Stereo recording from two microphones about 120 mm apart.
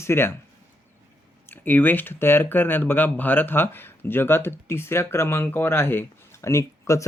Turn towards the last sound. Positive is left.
turn(degrees=25)  # may be behind; listen again after turning